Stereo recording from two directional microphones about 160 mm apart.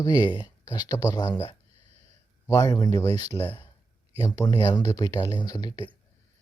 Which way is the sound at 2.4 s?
20° left (ahead or behind).